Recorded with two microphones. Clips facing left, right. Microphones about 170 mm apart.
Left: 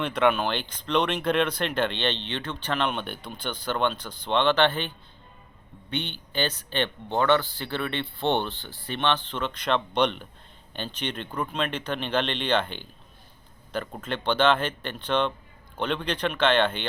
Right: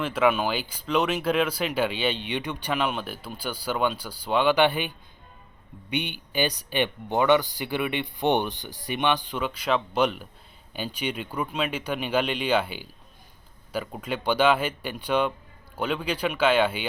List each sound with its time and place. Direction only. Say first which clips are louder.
0.0 s speech: even; 5° right (ahead or behind)